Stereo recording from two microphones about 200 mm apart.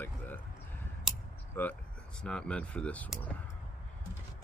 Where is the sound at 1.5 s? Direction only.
10° left (ahead or behind).